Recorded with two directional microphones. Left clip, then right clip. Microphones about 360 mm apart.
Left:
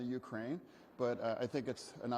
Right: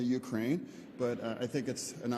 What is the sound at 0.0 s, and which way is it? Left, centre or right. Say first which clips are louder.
Speech: right 8 dB; centre.